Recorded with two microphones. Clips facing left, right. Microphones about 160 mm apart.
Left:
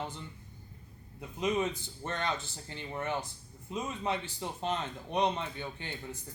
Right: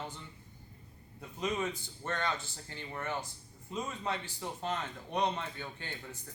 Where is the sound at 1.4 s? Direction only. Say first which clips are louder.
Left 4 dB; 20° left (ahead or behind).